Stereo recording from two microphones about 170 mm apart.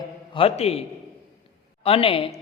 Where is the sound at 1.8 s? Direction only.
35° left (ahead or behind).